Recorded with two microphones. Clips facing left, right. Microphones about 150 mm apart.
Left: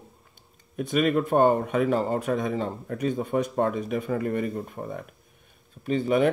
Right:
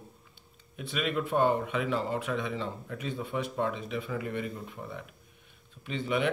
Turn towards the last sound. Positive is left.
turn(degrees=40)  # may be behind; listen again after turning